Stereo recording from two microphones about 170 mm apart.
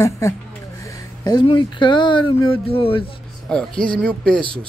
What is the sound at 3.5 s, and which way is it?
Speech, 5° left (ahead or behind).